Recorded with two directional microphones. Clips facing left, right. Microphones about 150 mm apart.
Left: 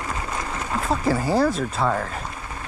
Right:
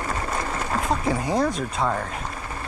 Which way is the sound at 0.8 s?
Centre (ahead or behind).